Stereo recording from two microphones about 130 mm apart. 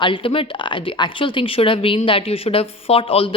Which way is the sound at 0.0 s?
40° left (ahead or behind).